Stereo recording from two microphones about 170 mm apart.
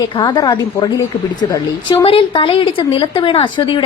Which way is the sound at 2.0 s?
30° left (ahead or behind).